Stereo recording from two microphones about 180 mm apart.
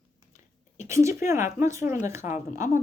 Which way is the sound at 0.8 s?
15° right (ahead or behind).